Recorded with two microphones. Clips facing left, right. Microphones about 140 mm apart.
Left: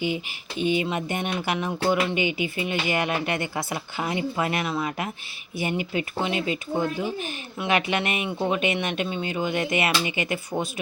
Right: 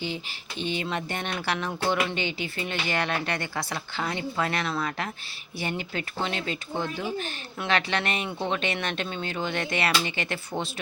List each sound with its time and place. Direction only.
0.6 s speech: 10° left (ahead or behind)
1.6 s speech: 10° left (ahead or behind)